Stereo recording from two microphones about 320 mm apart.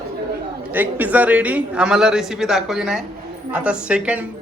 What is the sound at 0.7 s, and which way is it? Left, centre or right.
A man's voice, centre.